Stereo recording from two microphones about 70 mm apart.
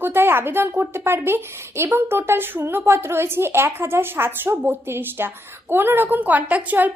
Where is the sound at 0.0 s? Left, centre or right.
Right.